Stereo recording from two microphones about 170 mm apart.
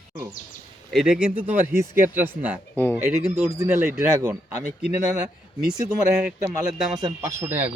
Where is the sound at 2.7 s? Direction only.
10° left (ahead or behind).